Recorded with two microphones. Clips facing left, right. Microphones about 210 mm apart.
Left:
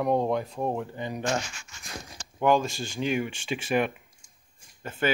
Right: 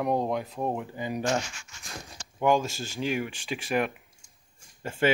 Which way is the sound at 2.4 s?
10° right (ahead or behind).